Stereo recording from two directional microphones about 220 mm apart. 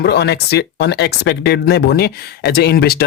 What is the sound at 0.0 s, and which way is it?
Speech, 50° left (ahead or behind).